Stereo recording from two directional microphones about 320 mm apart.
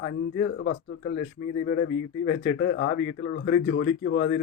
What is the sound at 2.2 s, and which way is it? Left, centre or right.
Speech, left.